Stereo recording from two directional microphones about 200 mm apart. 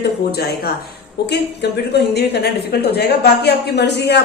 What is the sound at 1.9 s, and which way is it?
Speech, 55° left (ahead or behind).